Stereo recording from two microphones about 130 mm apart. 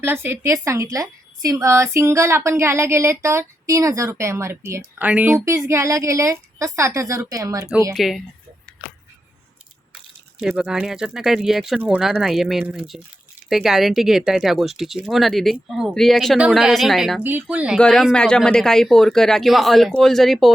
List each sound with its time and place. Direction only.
0.0 s a woman's voice: 15° right (ahead or behind)
4.9 s a woman's voice: 10° right (ahead or behind)
7.9 s speech: centre (ahead or behind)
10.6 s speech: 5° right (ahead or behind)
17.2 s speech: 15° right (ahead or behind)
17.7 s speech: 5° left (ahead or behind)